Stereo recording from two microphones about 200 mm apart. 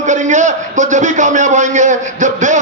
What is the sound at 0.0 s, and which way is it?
A man's voice, 35° right (ahead or behind).